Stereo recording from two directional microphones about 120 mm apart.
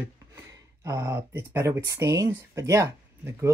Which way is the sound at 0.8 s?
25° right (ahead or behind).